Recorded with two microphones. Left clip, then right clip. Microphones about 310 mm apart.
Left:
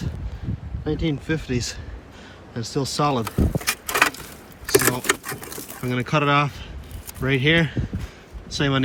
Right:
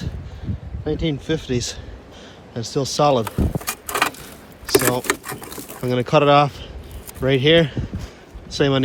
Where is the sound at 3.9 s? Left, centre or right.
Centre.